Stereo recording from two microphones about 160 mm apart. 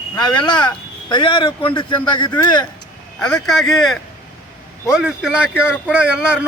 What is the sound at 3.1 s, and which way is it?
Speech, 5° left (ahead or behind).